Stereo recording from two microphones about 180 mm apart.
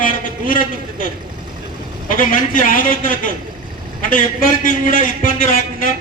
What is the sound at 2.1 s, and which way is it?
A man's voice, 50° left (ahead or behind).